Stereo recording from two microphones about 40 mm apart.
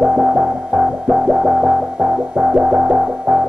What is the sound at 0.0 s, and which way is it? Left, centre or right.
Music, centre.